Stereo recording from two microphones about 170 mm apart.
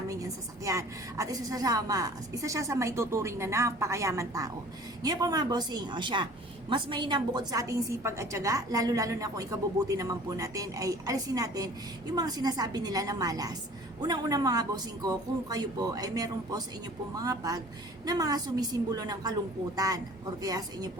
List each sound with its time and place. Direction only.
0.1 s a woman's voice: 20° right (ahead or behind)